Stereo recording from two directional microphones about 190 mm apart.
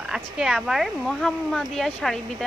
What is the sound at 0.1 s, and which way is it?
Speech, 5° right (ahead or behind).